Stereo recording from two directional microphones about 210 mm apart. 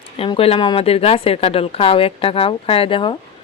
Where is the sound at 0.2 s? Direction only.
25° left (ahead or behind).